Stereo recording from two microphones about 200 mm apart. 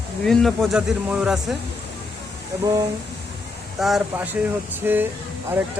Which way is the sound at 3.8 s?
Centre (ahead or behind).